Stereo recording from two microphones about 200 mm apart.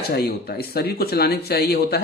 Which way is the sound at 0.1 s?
50° left (ahead or behind).